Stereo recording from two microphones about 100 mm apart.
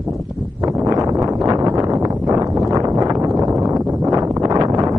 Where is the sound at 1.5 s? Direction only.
40° right (ahead or behind).